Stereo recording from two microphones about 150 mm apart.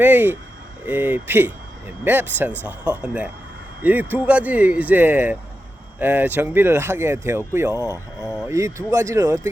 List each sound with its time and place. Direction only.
0.0 s speech: 10° right (ahead or behind)